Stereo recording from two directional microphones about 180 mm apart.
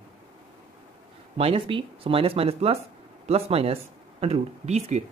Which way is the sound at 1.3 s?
30° right (ahead or behind).